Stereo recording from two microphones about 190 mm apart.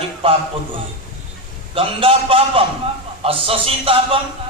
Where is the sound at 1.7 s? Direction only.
30° right (ahead or behind).